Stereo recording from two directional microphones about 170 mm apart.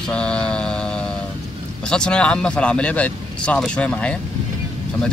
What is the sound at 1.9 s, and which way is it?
Speech, 5° left (ahead or behind).